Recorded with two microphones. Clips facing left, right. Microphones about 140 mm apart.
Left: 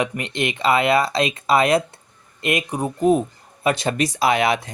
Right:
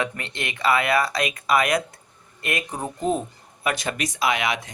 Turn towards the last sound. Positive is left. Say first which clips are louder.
# left 5 dB
turn(degrees=35)  # may be behind; listen again after turning